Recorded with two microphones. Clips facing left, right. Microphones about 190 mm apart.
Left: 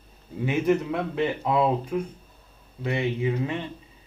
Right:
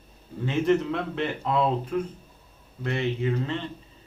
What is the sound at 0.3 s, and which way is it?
Speech, 15° left (ahead or behind).